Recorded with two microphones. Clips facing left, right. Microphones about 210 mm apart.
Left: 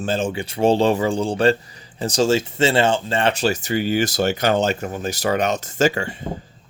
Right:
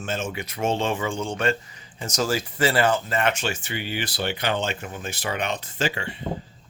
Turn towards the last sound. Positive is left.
turn(degrees=45)  # may be behind; listen again after turning